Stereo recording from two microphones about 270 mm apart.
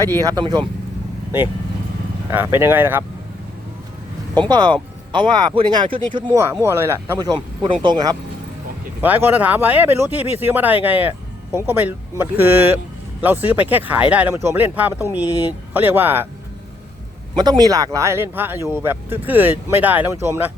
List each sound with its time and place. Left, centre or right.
0.2 s speech: centre
2.3 s speech: centre
4.4 s speech: centre
17.6 s speech: centre